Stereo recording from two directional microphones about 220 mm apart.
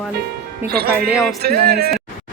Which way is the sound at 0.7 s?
45° right (ahead or behind).